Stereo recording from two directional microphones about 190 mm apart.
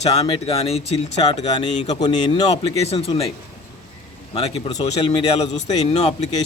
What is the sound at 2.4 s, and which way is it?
Speech, 35° left (ahead or behind).